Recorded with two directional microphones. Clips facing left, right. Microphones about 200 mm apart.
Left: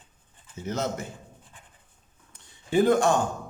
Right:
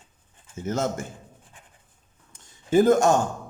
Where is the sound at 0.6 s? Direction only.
50° right (ahead or behind).